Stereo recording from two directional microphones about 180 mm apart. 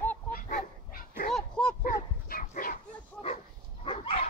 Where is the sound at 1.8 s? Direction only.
50° left (ahead or behind).